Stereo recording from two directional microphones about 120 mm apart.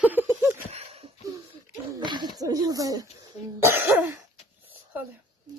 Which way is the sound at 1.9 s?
40° right (ahead or behind).